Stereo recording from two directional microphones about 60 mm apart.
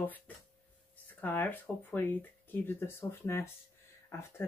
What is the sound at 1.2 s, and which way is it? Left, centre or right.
Speech, left.